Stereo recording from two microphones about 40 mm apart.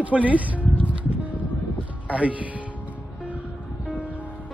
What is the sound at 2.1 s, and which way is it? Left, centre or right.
Speech, right.